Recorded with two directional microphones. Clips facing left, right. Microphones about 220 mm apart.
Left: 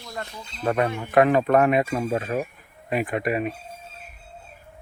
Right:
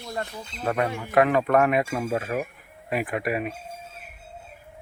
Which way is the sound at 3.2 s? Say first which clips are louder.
Left 2 dB; 5° right (ahead or behind).